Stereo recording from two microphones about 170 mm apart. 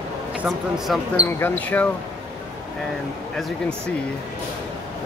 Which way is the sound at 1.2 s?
10° left (ahead or behind).